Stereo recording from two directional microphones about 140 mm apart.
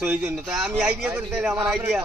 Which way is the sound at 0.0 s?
10° right (ahead or behind).